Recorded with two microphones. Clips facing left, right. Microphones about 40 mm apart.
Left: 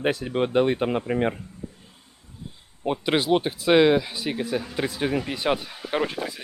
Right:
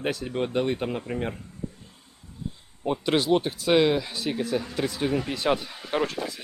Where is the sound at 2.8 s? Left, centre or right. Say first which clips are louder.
Left 1 dB; centre.